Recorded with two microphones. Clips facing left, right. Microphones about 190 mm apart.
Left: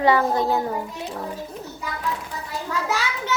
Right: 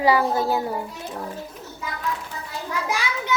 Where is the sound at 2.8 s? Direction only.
15° right (ahead or behind).